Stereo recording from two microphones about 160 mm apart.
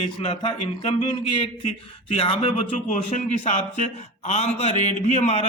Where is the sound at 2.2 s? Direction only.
40° left (ahead or behind).